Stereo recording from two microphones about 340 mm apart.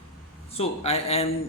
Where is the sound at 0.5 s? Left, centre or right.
Centre.